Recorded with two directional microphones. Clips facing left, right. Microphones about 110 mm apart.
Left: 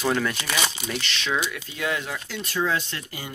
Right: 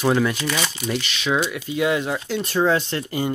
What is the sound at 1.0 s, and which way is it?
Speech, 10° right (ahead or behind).